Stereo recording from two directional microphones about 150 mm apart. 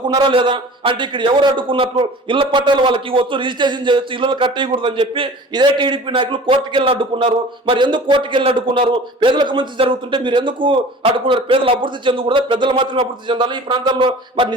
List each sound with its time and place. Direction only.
0.1 s a man's voice: 30° right (ahead or behind)